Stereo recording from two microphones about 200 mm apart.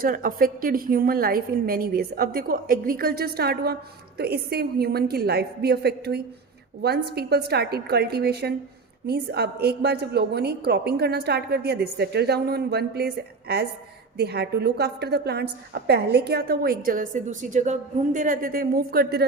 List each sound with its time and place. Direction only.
0.0 s a woman's voice: 45° right (ahead or behind)